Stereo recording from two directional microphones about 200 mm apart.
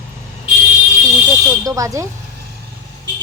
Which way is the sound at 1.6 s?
15° right (ahead or behind).